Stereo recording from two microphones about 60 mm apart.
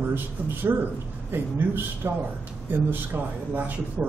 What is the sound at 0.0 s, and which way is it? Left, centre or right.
Speech, right.